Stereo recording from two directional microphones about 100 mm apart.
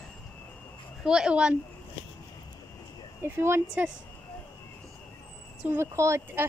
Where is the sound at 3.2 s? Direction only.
25° right (ahead or behind).